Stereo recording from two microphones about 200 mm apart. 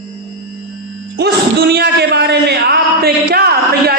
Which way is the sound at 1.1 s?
50° right (ahead or behind).